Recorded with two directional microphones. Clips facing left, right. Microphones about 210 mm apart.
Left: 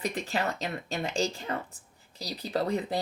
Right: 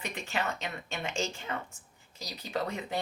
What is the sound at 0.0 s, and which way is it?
Speech, 35° left (ahead or behind).